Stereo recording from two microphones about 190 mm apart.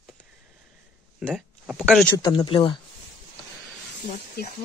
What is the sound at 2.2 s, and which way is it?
Speech, 25° left (ahead or behind).